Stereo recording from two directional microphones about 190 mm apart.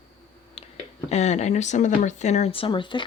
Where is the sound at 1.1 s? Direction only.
35° left (ahead or behind).